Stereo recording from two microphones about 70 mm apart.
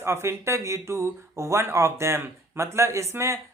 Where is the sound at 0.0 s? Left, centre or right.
Right.